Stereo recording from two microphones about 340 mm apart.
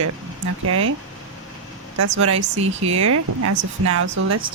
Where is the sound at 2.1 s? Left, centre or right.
Right.